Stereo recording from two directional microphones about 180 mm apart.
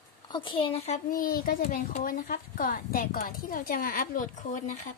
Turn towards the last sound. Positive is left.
turn(degrees=45)  # may be behind; listen again after turning